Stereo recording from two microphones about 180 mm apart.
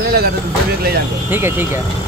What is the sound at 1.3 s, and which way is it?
Speech, 10° right (ahead or behind).